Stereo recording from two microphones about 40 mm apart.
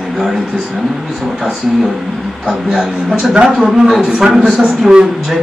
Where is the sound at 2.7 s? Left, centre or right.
Centre.